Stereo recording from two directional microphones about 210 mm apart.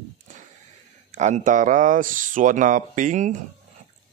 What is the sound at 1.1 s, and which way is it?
Speech, 35° right (ahead or behind).